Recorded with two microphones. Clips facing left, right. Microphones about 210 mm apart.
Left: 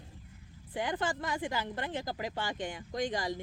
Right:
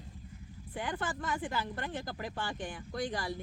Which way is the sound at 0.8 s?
15° left (ahead or behind).